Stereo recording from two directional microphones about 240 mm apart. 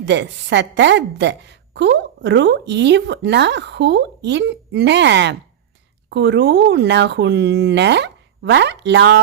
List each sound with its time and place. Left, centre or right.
0.0 s a woman's voice: right